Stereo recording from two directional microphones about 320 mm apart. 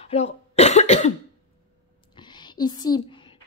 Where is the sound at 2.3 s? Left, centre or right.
Centre.